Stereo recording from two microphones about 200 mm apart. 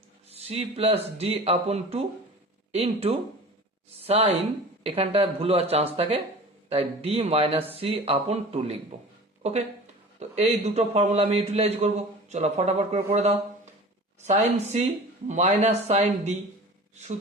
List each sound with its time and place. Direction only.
0.3 s a man's voice: 30° right (ahead or behind)